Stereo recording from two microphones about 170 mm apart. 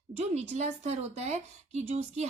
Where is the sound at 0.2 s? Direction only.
40° right (ahead or behind).